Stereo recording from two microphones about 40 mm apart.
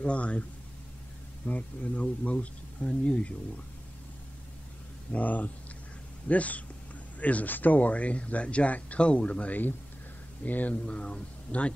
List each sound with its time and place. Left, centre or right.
0.0 s speech: left
5.1 s speech: left
10.9 s speech: left